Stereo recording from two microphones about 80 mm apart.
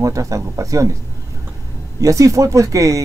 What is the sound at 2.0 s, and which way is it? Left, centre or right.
Speech, right.